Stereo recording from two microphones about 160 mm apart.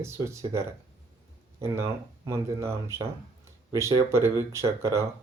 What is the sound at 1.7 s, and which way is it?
Speech, 15° right (ahead or behind).